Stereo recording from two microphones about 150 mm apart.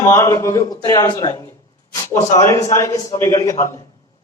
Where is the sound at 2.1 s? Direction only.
50° left (ahead or behind).